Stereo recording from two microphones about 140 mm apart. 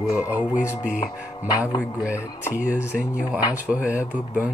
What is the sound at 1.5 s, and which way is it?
Mantra, 25° left (ahead or behind).